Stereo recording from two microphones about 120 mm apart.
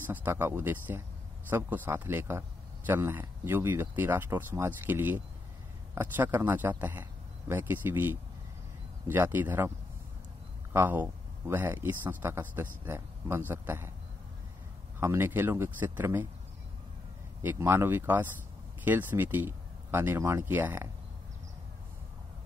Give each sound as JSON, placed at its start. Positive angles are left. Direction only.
{"t": 0.0, "sound": "speech", "side_deg": -15}
{"t": 10.7, "sound": "speech", "side_deg": -15}
{"t": 15.0, "sound": "speech", "side_deg": -20}
{"t": 17.4, "sound": "speech", "side_deg": -20}